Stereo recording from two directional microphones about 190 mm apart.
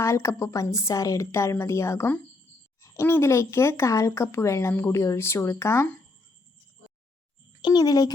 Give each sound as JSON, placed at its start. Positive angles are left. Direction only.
{"t": 0.0, "sound": "speech", "side_deg": 15}
{"t": 7.6, "sound": "a child's voice", "side_deg": 20}